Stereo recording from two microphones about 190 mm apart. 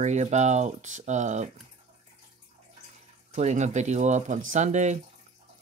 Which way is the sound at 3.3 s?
35° right (ahead or behind).